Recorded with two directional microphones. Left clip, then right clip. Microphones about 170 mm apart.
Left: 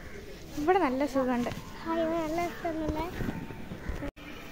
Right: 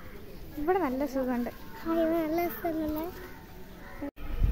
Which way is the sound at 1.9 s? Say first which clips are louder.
Right 2 dB; 85° right.